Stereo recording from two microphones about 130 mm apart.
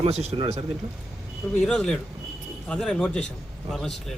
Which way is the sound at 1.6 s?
5° left (ahead or behind).